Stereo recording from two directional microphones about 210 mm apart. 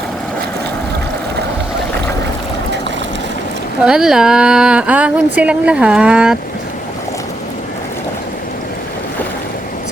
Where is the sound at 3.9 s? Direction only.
5° right (ahead or behind).